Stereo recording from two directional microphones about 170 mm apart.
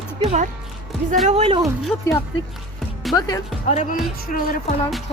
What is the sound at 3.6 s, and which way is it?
Speech, 40° left (ahead or behind).